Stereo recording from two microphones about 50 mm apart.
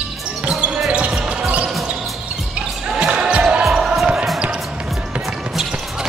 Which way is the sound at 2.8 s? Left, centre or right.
Centre.